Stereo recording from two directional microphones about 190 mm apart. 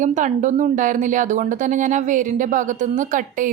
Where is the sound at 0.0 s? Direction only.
40° right (ahead or behind).